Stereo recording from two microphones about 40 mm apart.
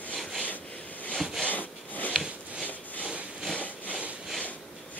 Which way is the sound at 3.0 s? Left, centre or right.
Right.